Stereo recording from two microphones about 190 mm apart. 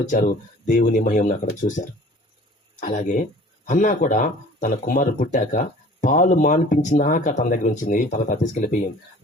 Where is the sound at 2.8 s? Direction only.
40° left (ahead or behind).